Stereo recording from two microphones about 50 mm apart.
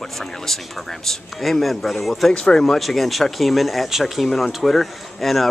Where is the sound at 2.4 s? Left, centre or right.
Centre.